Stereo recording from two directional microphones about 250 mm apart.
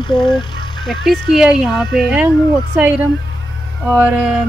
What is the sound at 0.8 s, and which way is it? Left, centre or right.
Speech, centre.